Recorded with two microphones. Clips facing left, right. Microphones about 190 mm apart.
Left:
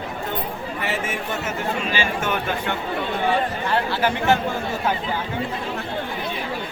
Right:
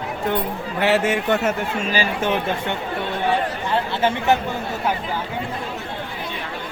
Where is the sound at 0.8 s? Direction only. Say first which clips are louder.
Right 10 dB; 75° right (ahead or behind).